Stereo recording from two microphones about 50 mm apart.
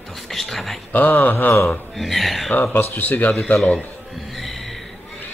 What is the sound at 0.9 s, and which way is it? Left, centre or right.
Speech, left.